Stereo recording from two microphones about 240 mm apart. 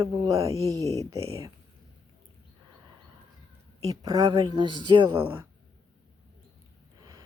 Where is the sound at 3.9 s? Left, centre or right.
Centre.